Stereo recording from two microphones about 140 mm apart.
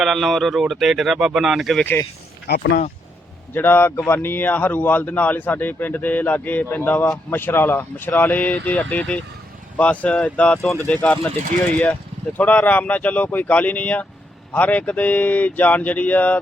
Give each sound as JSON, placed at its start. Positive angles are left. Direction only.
{"t": 0.0, "sound": "speech", "side_deg": 0}
{"t": 1.8, "sound": "speech", "side_deg": 15}
{"t": 3.5, "sound": "speech", "side_deg": 15}
{"t": 12.4, "sound": "speech", "side_deg": 10}